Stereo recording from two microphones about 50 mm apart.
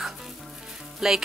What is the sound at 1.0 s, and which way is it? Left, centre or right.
Frying, centre.